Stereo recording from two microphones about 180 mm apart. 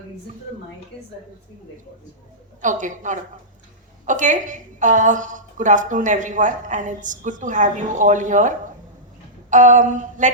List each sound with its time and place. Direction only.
2.6 s a woman's voice: 45° right (ahead or behind)